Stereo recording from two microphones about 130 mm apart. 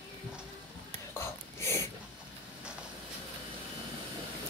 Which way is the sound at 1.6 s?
20° left (ahead or behind).